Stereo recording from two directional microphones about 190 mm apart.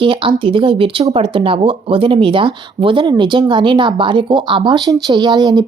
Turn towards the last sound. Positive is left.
turn(degrees=-20)  # may be behind; listen again after turning